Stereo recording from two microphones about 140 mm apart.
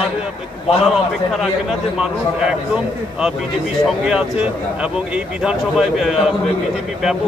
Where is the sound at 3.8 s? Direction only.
5° right (ahead or behind).